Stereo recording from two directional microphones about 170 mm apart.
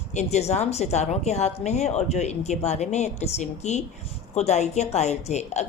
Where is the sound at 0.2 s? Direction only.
40° left (ahead or behind).